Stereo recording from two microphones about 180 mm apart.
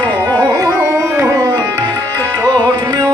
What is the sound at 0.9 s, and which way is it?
Tabla, 15° right (ahead or behind).